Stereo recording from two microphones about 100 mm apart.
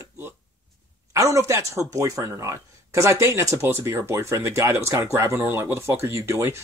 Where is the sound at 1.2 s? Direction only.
30° right (ahead or behind).